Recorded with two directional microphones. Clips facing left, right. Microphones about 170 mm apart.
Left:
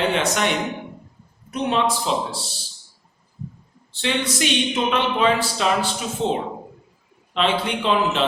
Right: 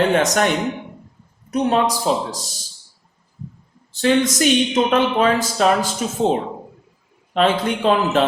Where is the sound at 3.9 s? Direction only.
45° right (ahead or behind).